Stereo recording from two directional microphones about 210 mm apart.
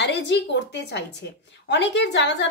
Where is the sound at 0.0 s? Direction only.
55° left (ahead or behind).